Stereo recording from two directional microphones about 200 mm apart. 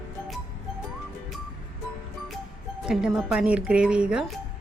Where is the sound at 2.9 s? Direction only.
5° right (ahead or behind).